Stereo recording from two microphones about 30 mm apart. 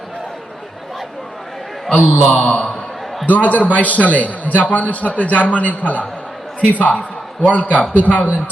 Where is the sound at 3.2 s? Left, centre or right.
Left.